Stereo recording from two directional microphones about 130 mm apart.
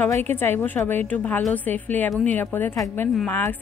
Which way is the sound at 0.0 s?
15° left (ahead or behind).